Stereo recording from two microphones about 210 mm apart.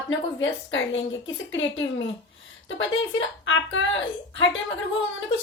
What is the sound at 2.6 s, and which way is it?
A woman's voice, 65° left (ahead or behind).